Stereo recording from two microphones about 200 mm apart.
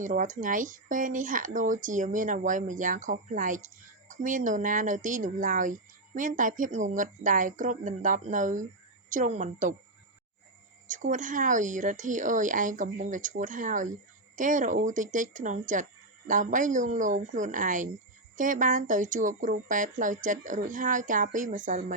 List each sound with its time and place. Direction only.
0.0 s speech: 40° right (ahead or behind)
10.8 s speech: 40° right (ahead or behind)